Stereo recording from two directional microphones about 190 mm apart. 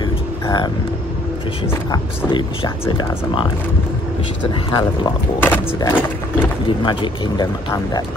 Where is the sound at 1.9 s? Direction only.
25° left (ahead or behind).